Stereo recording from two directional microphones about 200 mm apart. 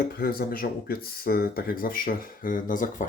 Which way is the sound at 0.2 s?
50° left (ahead or behind).